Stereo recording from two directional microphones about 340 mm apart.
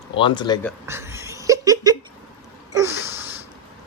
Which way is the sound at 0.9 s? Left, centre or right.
Centre.